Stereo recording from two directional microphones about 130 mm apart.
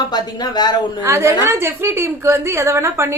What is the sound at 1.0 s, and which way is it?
A woman's voice, 20° right (ahead or behind).